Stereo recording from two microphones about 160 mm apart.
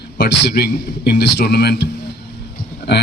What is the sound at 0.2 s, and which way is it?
A man's voice, 90° left.